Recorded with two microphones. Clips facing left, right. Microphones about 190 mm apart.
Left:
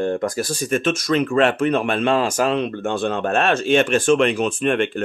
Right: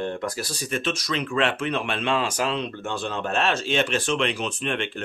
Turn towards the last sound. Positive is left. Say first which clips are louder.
# left 9 dB
turn(degrees=50)  # may be behind; listen again after turning